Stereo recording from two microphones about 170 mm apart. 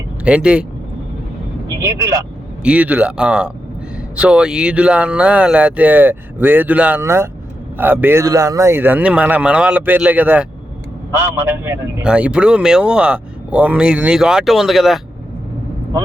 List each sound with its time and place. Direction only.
0.3 s speech: 5° right (ahead or behind)
1.6 s a man's voice: 15° right (ahead or behind); by 15.0 s centre (ahead or behind)